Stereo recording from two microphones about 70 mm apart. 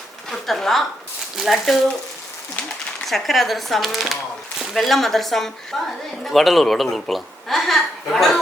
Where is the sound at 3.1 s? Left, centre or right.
Centre.